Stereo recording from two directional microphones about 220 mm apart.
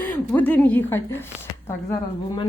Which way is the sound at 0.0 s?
5° left (ahead or behind).